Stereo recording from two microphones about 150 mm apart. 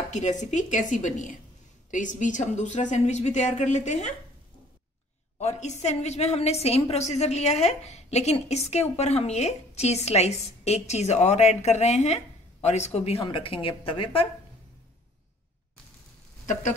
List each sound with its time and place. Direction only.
0.1 s a woman's voice: 55° left (ahead or behind)
5.4 s a woman's voice: 50° left (ahead or behind)